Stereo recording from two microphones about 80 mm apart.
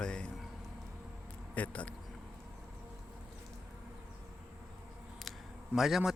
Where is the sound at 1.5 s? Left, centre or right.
Centre.